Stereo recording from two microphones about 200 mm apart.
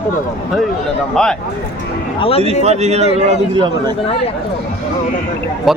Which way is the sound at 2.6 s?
35° right (ahead or behind).